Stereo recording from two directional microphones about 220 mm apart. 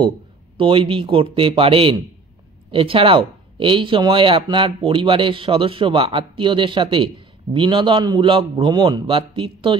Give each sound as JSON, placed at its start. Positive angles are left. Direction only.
{"t": 0.6, "sound": "speech", "side_deg": -25}